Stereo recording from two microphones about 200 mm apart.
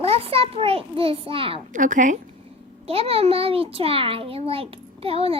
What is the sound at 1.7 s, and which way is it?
Speech, 40° right (ahead or behind).